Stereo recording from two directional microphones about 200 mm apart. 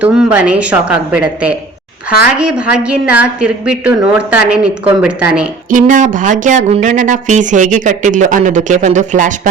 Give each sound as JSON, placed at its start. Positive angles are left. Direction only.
{"t": 0.0, "sound": "a woman's voice", "side_deg": -5}
{"t": 5.7, "sound": "speech", "side_deg": -40}